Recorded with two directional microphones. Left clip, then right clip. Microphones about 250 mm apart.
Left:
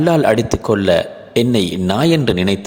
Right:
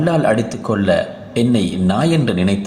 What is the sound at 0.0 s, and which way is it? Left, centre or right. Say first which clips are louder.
A man's voice: left 2 dB; left.